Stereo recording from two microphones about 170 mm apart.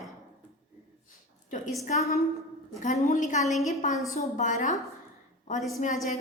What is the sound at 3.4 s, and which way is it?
Speech, centre (ahead or behind).